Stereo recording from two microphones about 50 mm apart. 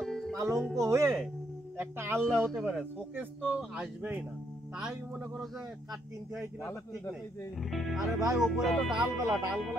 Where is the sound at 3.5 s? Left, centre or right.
Right.